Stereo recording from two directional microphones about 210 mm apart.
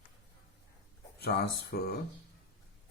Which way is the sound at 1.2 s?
50° left (ahead or behind).